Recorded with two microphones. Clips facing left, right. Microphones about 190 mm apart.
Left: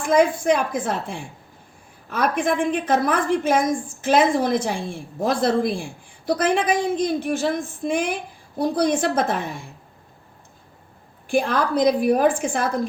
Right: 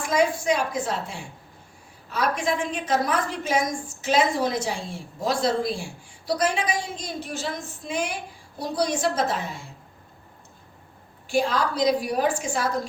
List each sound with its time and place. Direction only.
0.0 s a woman's voice: 55° left (ahead or behind)
11.3 s a woman's voice: 55° left (ahead or behind)